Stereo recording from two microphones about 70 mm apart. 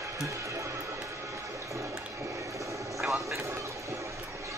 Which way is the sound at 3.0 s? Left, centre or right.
Centre.